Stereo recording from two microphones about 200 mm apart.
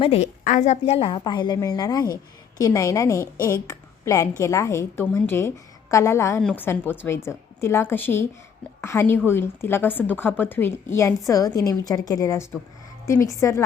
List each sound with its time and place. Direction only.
0.0 s a woman's voice: 30° left (ahead or behind); by 13.6 s 15° left (ahead or behind)